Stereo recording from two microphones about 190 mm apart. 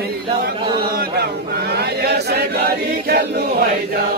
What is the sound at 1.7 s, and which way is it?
Choir, 60° right (ahead or behind).